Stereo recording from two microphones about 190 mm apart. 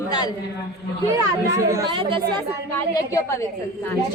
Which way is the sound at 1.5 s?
15° right (ahead or behind).